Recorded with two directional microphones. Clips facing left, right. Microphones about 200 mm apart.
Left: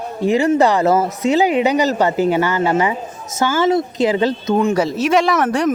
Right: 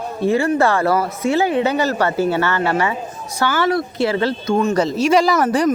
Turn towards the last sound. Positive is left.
turn(degrees=0)  # may be behind; listen again after turning